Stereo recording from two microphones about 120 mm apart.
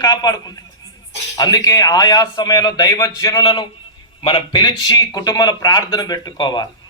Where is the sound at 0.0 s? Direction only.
35° left (ahead or behind).